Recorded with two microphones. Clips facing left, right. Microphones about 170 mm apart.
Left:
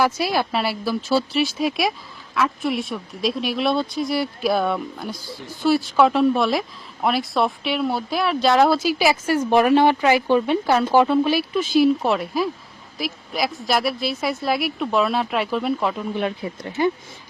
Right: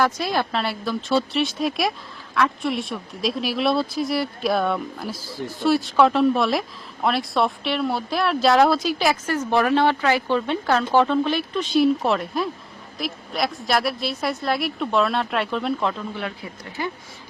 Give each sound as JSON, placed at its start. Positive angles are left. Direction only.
{"t": 0.0, "sound": "speech", "side_deg": 5}
{"t": 16.1, "sound": "speech", "side_deg": 25}